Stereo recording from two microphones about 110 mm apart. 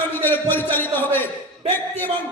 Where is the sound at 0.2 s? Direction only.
20° left (ahead or behind).